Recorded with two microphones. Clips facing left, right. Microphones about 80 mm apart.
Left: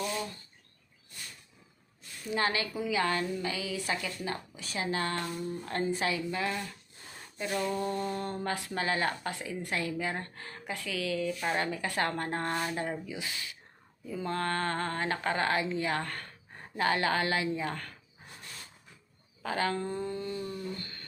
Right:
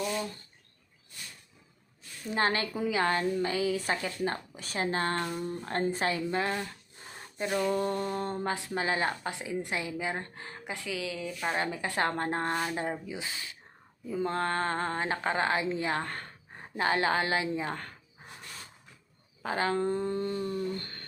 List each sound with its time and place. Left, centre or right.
2.3 s a woman's voice: right
7.3 s speech: right
7.7 s speech: right; by 11.6 s centre
11.6 s speech: right
19.4 s a woman's voice: right